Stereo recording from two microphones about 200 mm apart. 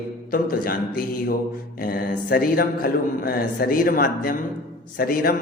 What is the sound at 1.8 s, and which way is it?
Speech, 45° left (ahead or behind).